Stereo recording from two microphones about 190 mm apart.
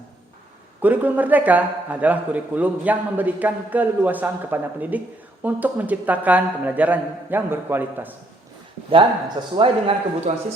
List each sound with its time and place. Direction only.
0.8 s a man's voice: 10° right (ahead or behind)
9.6 s speech: 30° right (ahead or behind)